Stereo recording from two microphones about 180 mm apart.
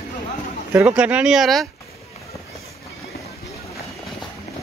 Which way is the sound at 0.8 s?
5° right (ahead or behind).